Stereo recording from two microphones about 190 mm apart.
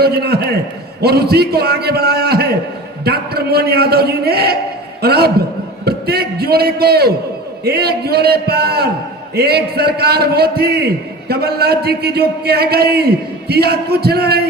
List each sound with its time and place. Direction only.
0.0 s a man's voice: 55° right (ahead or behind)